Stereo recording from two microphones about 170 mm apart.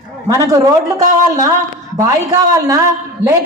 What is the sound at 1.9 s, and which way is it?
Speech, 20° right (ahead or behind).